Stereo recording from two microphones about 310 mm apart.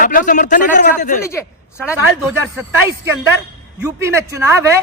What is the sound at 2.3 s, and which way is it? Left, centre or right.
Speech, centre.